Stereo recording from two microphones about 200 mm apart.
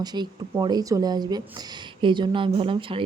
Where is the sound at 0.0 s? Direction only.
20° right (ahead or behind).